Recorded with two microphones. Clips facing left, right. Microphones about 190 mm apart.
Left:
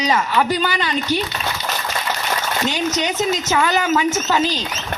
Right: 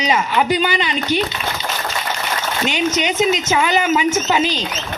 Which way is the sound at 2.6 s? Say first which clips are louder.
Right 3 dB; 20° right (ahead or behind).